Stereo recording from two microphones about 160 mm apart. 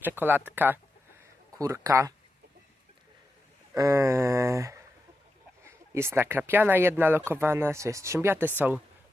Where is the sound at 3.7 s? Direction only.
20° right (ahead or behind).